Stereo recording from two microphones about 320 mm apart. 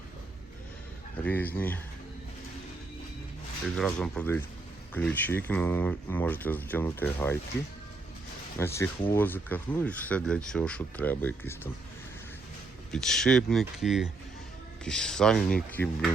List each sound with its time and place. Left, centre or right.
1.1 s speech: centre
3.8 s speech: centre
8.5 s speech: centre
12.9 s speech: centre